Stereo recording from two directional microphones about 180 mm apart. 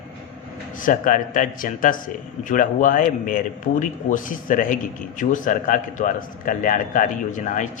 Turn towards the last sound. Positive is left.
turn(degrees=45)  # may be behind; listen again after turning